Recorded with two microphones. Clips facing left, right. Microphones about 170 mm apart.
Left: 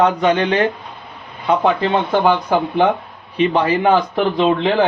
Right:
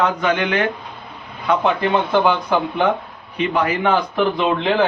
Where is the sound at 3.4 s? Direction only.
30° left (ahead or behind).